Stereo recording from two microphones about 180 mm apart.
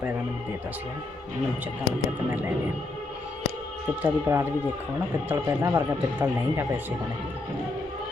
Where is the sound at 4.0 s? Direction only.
15° right (ahead or behind).